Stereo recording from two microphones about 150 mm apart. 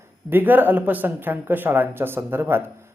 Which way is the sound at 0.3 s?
15° right (ahead or behind).